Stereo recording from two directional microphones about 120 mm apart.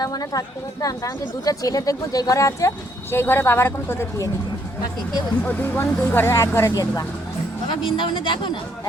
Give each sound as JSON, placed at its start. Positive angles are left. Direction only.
{"t": 0.0, "sound": "speech", "side_deg": 30}
{"t": 5.4, "sound": "speech", "side_deg": 15}
{"t": 7.7, "sound": "speech", "side_deg": 45}